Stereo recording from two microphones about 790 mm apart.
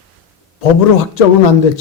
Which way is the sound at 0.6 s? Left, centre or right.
Left.